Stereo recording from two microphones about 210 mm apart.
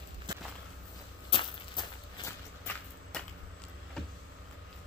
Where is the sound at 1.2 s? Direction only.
25° left (ahead or behind).